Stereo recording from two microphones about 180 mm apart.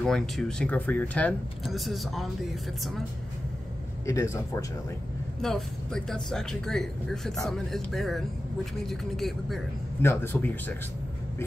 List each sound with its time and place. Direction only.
0.0 s speech: 5° left (ahead or behind)
4.0 s speech: 15° left (ahead or behind)
5.4 s speech: centre (ahead or behind)
10.0 s speech: 10° left (ahead or behind)